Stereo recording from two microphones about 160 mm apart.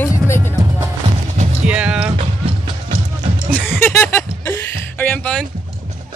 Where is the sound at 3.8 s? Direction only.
10° left (ahead or behind).